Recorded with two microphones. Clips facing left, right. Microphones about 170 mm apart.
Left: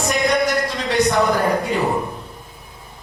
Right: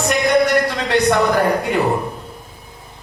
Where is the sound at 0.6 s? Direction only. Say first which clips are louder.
Right 2 dB; 65° right (ahead or behind).